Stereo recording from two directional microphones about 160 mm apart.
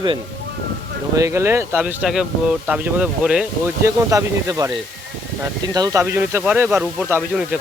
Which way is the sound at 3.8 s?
20° right (ahead or behind).